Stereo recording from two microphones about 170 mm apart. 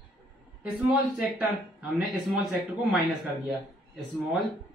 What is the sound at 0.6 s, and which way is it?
Speech, 5° right (ahead or behind).